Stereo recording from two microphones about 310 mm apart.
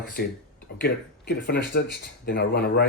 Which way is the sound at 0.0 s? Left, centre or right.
Left.